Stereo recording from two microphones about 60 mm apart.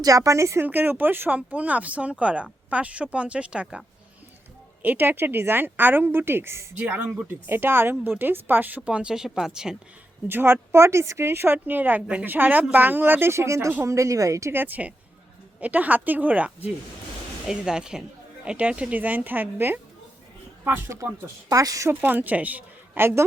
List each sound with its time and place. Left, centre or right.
0.0 s speech: right
0.6 s speech: right
1.4 s speech: right
4.8 s speech: right
6.7 s speech: right; by 9.7 s centre
10.2 s speech: right
11.3 s speech: right
14.5 s speech: right
17.5 s speech: centre; by 20.9 s right
21.5 s speech: right
22.0 s speech: right
23.0 s speech: right